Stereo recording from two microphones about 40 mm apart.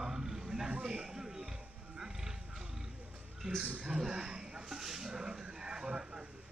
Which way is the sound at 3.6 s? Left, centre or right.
Right.